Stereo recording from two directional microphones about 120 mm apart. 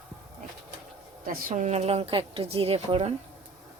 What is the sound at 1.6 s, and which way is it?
Speech, 65° right (ahead or behind).